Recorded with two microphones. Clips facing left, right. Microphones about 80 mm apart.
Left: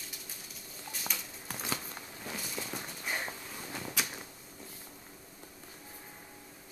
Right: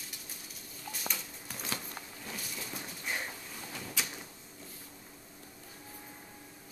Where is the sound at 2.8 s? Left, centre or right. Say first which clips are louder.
Right 2 dB; centre.